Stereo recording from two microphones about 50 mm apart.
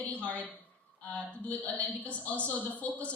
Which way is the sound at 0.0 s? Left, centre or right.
Left.